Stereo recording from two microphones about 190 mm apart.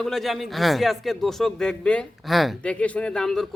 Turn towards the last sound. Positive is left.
turn(degrees=5)  # may be behind; listen again after turning